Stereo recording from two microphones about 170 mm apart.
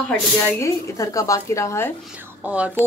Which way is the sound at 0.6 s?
20° left (ahead or behind).